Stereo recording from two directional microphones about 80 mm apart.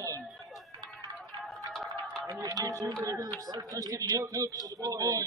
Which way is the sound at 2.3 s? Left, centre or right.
Right.